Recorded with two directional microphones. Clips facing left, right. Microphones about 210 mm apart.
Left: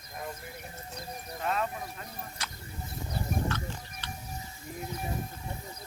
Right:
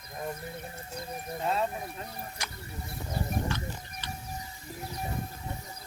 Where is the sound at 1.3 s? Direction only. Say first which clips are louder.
Right 2 dB; 25° right (ahead or behind).